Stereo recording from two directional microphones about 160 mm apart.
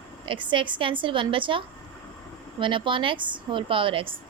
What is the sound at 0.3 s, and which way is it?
Speech, 30° right (ahead or behind).